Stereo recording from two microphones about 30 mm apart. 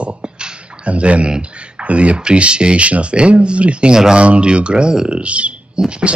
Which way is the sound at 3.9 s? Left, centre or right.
Right.